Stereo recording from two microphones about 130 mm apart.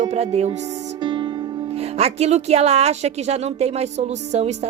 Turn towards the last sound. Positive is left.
turn(degrees=-55)  # may be behind; listen again after turning